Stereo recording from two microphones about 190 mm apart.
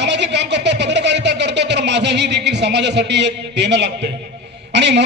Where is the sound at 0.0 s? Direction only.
65° right (ahead or behind).